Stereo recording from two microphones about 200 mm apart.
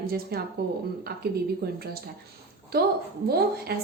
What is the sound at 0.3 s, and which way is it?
Speech, 50° right (ahead or behind).